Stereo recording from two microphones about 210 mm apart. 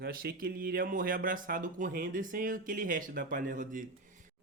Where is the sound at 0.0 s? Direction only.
45° right (ahead or behind).